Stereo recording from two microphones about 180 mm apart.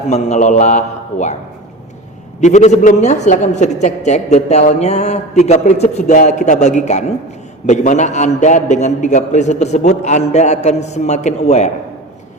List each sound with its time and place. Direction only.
0.1 s a woman's voice: 40° left (ahead or behind)
2.4 s a woman's voice: 40° left (ahead or behind)